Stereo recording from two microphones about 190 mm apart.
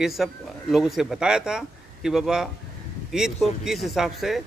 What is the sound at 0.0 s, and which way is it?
Speech, centre (ahead or behind).